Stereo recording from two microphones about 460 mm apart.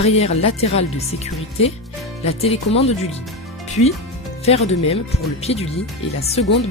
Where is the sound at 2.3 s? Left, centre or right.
Centre.